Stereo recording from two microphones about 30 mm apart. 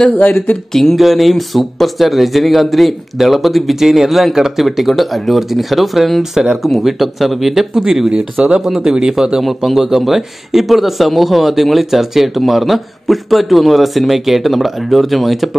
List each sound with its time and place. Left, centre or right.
0.1 s speech: left
0.9 s speech: centre
8.1 s speech: right
9.7 s speech: centre